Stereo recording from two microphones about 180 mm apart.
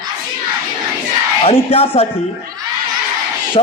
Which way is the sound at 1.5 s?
30° left (ahead or behind).